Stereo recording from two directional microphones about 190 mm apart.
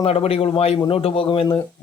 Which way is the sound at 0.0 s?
30° left (ahead or behind).